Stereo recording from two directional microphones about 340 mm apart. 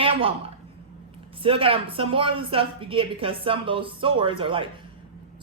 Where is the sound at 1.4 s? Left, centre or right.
Centre.